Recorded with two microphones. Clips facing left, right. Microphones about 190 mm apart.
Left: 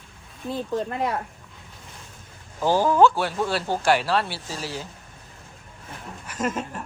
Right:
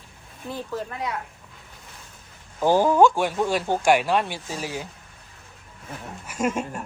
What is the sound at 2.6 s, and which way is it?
Speech, 15° right (ahead or behind).